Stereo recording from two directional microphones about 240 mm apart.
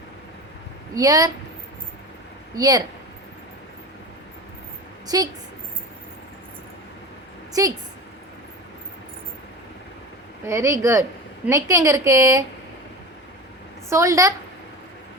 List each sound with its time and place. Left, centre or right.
0.9 s a woman's voice: centre
2.6 s a woman's voice: centre
5.0 s a woman's voice: centre
7.6 s a woman's voice: centre
10.4 s a woman's voice: centre
13.9 s a woman's voice: centre